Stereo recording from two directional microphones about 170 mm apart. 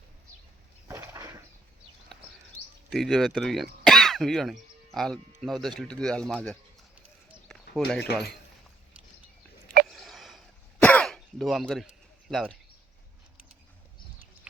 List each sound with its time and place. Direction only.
0.9 s a sound: 20° right (ahead or behind)
2.9 s speech: centre (ahead or behind)
3.8 s throat clearing: centre (ahead or behind)
4.9 s speech: centre (ahead or behind)
7.9 s speech: 70° left (ahead or behind)
9.9 s cough: centre (ahead or behind)